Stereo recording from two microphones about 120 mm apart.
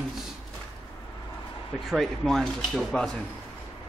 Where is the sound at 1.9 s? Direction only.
Centre (ahead or behind).